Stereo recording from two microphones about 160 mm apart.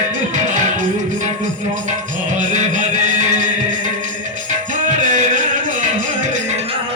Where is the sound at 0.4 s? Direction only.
50° right (ahead or behind).